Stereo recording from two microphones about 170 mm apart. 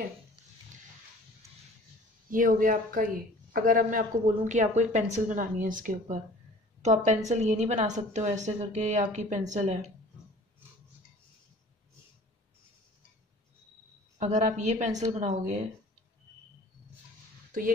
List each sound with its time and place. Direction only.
2.3 s a woman's voice: 55° right (ahead or behind)
14.1 s a woman's voice: 45° right (ahead or behind)
17.5 s a sound: 55° right (ahead or behind)